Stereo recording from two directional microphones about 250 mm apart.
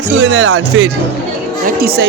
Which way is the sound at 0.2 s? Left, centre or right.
Right.